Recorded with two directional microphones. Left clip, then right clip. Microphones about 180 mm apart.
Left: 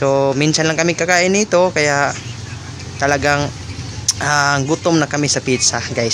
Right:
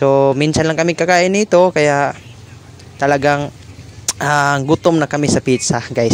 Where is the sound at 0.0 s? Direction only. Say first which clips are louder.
Right 3 dB; 40° right (ahead or behind).